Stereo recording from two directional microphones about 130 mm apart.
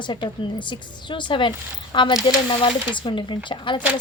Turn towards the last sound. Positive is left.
turn(degrees=35)  # may be behind; listen again after turning